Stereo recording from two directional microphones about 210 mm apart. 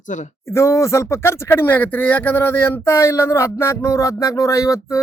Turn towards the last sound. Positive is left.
turn(degrees=15)  # may be behind; listen again after turning